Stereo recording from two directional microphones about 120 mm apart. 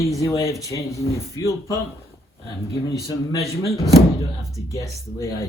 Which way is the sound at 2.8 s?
25° left (ahead or behind).